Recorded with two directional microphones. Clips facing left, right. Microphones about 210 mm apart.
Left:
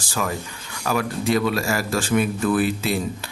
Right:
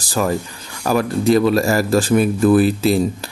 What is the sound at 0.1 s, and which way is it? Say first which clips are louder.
Speech: right 7 dB; 40° right (ahead or behind).